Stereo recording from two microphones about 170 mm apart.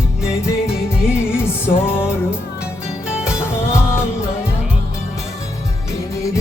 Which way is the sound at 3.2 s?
15° left (ahead or behind).